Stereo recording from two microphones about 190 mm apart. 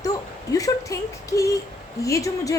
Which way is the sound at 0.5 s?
15° left (ahead or behind).